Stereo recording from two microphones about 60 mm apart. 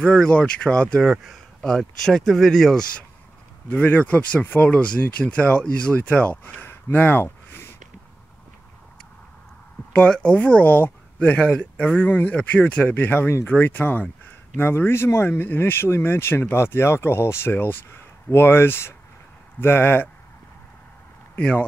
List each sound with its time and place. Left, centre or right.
0.0 s speech: centre
1.0 s speech: centre
3.7 s speech: left
6.4 s a sound: left
9.9 s speech: centre
10.6 s speech: left
11.3 s speech: centre; by 20.1 s left